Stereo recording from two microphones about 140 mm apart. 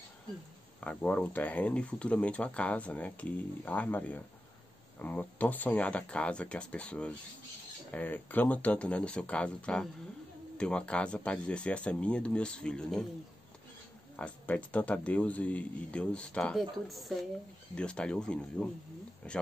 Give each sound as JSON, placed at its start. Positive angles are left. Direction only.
{"t": 0.7, "sound": "speech", "side_deg": 10}
{"t": 14.1, "sound": "speech", "side_deg": 10}